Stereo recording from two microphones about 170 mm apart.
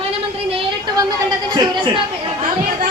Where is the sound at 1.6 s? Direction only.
30° right (ahead or behind).